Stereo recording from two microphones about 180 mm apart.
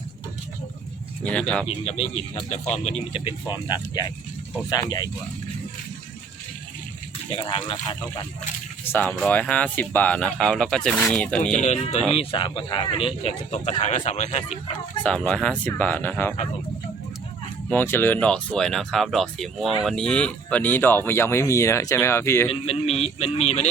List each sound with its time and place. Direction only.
1.2 s speech: 5° left (ahead or behind)
1.6 s speech: 35° left (ahead or behind)
3.2 s speech: 25° left (ahead or behind)
7.3 s speech: 30° left (ahead or behind)
8.9 s speech: 10° left (ahead or behind)
11.5 s speech: 40° left (ahead or behind)
15.0 s speech: 5° left (ahead or behind)
17.7 s speech: 10° left (ahead or behind)
22.4 s speech: 35° left (ahead or behind)